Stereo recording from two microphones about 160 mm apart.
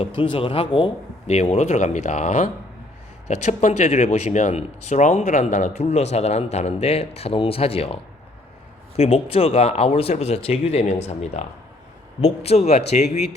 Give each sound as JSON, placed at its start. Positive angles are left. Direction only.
{"t": 0.0, "sound": "speech", "side_deg": 35}
{"t": 1.3, "sound": "speech", "side_deg": 45}
{"t": 9.0, "sound": "speech", "side_deg": 40}